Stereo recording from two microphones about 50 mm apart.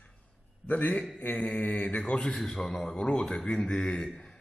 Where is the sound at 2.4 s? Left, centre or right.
Centre.